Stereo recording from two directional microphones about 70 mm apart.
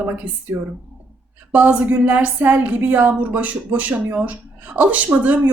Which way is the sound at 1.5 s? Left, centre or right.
Right.